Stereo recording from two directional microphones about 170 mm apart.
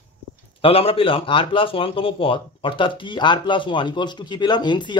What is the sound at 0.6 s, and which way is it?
A man's voice, 35° left (ahead or behind).